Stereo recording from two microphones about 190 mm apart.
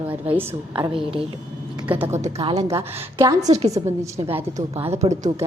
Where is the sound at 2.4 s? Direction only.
30° right (ahead or behind).